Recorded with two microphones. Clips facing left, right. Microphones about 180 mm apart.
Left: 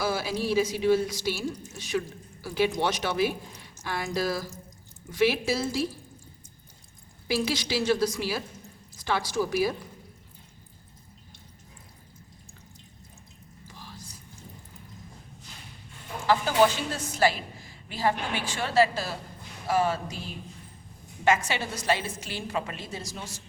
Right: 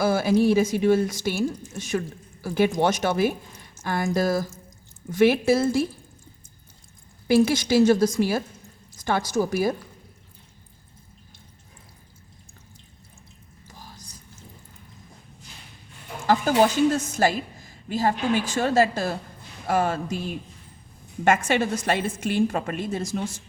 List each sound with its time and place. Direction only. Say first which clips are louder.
0.0 s a woman's voice: right 9 dB; 50° right (ahead or behind)
7.3 s a woman's voice: right 9 dB; 50° right (ahead or behind)
13.7 s whispering: even; 45° right (ahead or behind)
16.2 s a woman's voice: right 3 dB; 45° right (ahead or behind)
21.2 s a woman's voice: right 5 dB; 50° right (ahead or behind)